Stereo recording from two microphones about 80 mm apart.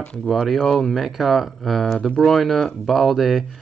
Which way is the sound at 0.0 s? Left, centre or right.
Centre.